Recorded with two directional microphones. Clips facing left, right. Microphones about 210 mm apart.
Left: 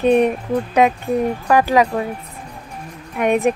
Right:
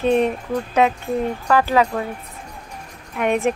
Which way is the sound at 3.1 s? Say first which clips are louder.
Left 3 dB; 15° left (ahead or behind).